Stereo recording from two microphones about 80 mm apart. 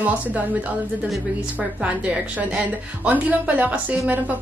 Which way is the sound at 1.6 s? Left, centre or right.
Centre.